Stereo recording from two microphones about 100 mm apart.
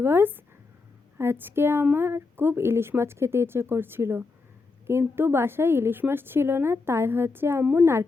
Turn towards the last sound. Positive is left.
turn(degrees=-25)  # may be behind; listen again after turning